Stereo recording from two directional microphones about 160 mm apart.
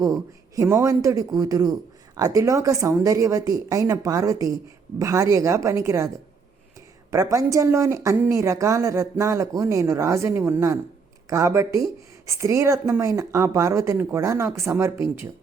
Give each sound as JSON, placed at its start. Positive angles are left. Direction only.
{"t": 0.0, "sound": "a woman's voice", "side_deg": -20}
{"t": 7.1, "sound": "a woman's voice", "side_deg": -20}